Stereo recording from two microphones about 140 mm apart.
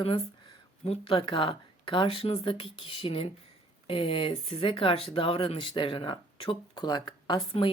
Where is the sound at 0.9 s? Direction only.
40° left (ahead or behind).